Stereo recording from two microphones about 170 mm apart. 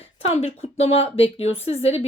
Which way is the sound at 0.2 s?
35° left (ahead or behind).